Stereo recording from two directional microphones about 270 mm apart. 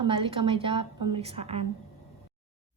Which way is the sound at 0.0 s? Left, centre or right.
Centre.